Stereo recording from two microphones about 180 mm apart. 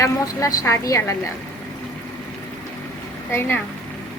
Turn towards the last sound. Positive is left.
turn(degrees=10)  # may be behind; listen again after turning